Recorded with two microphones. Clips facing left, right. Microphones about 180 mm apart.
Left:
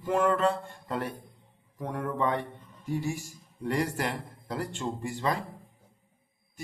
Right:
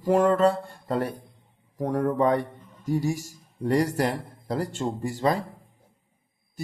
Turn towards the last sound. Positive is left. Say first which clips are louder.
# right 5 dB
turn(degrees=-40)  # may be behind; listen again after turning